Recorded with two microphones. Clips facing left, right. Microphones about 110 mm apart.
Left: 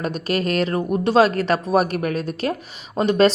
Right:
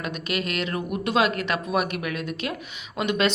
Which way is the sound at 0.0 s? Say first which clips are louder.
Left 6 dB; 40° left (ahead or behind).